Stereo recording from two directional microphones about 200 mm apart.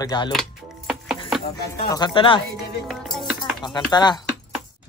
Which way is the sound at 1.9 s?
25° left (ahead or behind).